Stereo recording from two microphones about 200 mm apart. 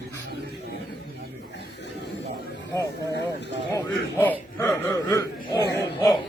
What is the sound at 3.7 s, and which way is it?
Chuckle, 10° left (ahead or behind).